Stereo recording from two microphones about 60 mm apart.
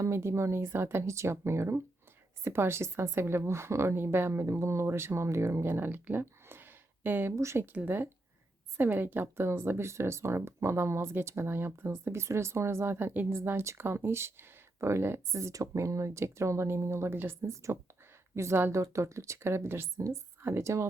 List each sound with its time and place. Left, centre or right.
0.0 s speech: right
5.6 s speech: right
7.3 s speech: right
7.9 s speech: right
17.5 s speech: right